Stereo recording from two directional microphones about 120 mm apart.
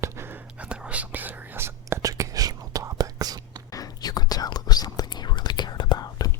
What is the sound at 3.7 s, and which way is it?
Whispering, 30° left (ahead or behind).